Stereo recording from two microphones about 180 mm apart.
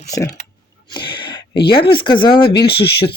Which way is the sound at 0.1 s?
20° left (ahead or behind).